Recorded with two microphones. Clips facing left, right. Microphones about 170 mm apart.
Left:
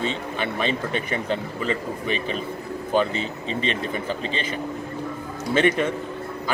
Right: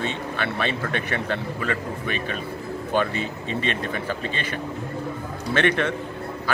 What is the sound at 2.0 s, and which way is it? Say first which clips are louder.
Speech: left 3 dB; 50° right (ahead or behind).